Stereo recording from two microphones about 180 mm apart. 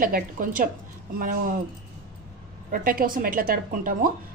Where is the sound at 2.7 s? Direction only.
50° right (ahead or behind).